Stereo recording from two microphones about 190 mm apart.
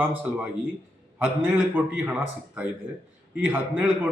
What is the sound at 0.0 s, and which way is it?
Speech, 10° right (ahead or behind).